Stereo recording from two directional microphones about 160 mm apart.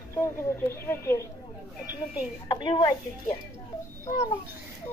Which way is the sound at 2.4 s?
25° left (ahead or behind).